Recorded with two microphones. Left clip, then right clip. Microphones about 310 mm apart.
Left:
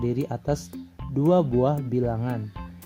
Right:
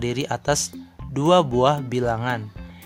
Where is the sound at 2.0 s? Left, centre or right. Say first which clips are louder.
Right 4 dB; right.